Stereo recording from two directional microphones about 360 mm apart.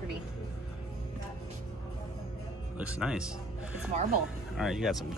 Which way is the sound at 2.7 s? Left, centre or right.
Centre.